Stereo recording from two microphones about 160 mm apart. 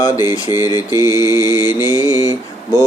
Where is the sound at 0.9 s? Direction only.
15° right (ahead or behind).